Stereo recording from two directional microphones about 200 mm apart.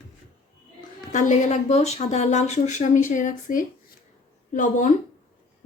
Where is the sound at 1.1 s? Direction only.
40° left (ahead or behind).